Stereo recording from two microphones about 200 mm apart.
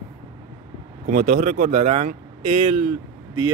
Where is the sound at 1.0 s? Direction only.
45° right (ahead or behind).